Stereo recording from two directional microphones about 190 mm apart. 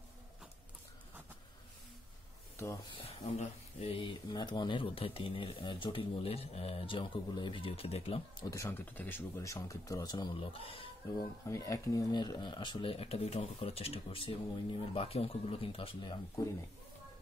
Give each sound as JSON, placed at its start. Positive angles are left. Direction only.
{"t": 2.5, "sound": "speech", "side_deg": 15}
{"t": 3.0, "sound": "speech", "side_deg": 30}
{"t": 8.5, "sound": "speech", "side_deg": 15}
{"t": 11.4, "sound": "speech", "side_deg": 15}